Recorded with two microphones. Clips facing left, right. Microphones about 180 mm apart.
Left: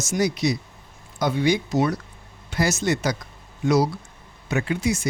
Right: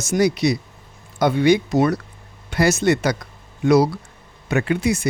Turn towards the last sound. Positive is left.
turn(degrees=-60)  # may be behind; listen again after turning